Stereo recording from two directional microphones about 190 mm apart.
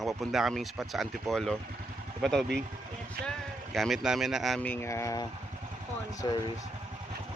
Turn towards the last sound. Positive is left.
turn(degrees=25)  # may be behind; listen again after turning